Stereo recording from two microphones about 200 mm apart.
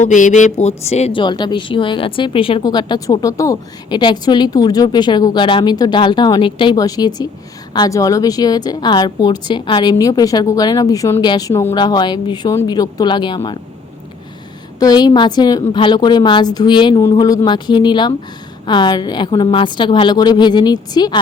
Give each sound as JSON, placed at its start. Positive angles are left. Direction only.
{"t": 0.0, "sound": "speech", "side_deg": 40}
{"t": 14.8, "sound": "speech", "side_deg": 20}